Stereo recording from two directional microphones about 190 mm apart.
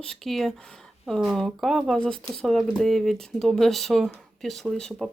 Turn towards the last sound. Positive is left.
turn(degrees=5)  # may be behind; listen again after turning